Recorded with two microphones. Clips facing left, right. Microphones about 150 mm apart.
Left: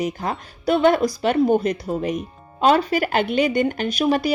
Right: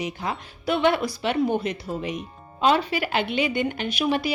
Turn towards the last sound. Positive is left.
turn(degrees=40)  # may be behind; listen again after turning